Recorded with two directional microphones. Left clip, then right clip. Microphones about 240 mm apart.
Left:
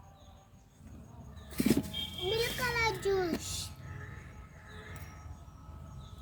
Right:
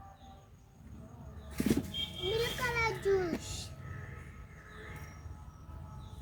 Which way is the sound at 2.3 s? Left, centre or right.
Left.